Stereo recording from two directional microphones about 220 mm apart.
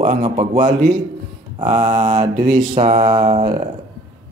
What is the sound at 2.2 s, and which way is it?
Speech, 35° right (ahead or behind).